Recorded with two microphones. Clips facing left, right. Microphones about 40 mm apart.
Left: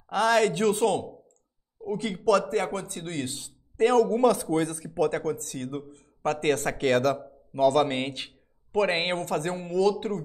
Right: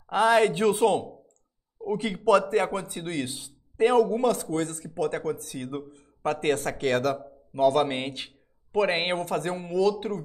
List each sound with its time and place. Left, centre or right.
0.0 s a man's voice: centre